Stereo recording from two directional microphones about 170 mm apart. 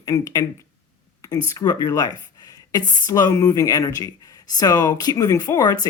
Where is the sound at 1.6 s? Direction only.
20° left (ahead or behind).